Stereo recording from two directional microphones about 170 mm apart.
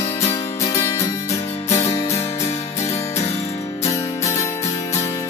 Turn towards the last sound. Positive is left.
turn(degrees=20)  # may be behind; listen again after turning